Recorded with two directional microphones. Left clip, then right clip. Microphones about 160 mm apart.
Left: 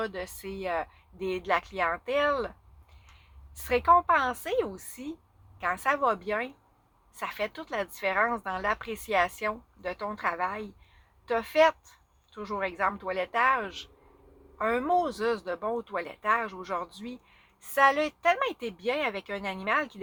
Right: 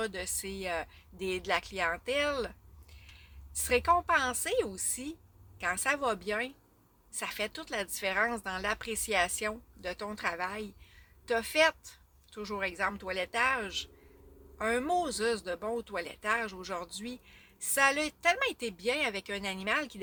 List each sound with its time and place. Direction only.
0.0 s a woman's voice: 40° right (ahead or behind)
3.6 s a woman's voice: 40° right (ahead or behind)